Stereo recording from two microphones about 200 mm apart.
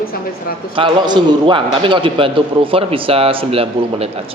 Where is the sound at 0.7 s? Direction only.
25° right (ahead or behind).